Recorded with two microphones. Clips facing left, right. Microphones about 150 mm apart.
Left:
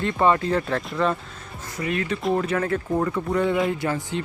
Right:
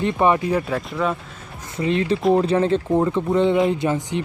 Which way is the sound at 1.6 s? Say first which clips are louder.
Right 6 dB; 25° right (ahead or behind).